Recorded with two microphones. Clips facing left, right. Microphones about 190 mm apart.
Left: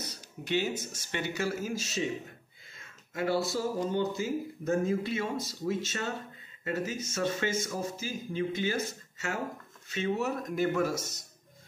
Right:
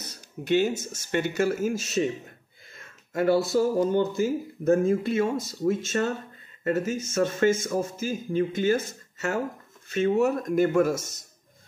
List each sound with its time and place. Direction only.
0.0 s speech: 50° right (ahead or behind)
3.1 s speech: 50° right (ahead or behind)